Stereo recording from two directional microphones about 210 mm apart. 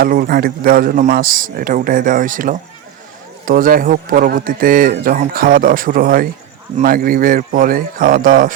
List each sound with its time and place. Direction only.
0.0 s a man's voice: 45° right (ahead or behind)